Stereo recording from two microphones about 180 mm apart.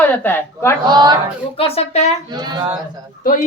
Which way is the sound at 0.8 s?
25° right (ahead or behind).